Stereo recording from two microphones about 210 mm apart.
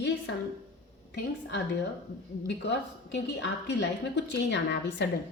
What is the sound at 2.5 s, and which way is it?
A woman's voice, 55° left (ahead or behind).